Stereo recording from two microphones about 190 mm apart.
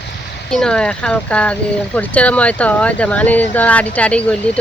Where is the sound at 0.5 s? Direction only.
5° left (ahead or behind).